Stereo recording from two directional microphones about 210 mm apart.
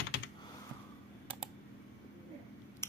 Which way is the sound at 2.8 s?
10° left (ahead or behind).